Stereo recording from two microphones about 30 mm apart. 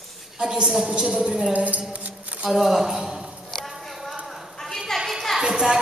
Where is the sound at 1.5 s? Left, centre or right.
Right.